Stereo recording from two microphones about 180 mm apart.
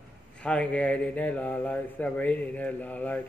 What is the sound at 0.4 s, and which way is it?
Speech, 5° left (ahead or behind).